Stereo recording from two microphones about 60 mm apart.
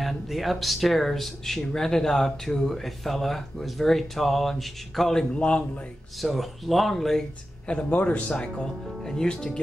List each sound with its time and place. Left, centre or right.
0.0 s speech: centre
5.3 s a man's voice: centre
6.2 s speech: centre
7.6 s speech: centre